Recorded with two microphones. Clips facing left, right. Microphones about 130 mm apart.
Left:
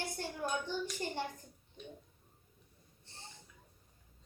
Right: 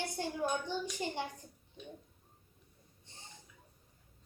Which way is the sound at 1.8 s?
Centre (ahead or behind).